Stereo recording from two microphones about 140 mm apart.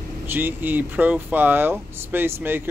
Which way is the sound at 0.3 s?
15° right (ahead or behind).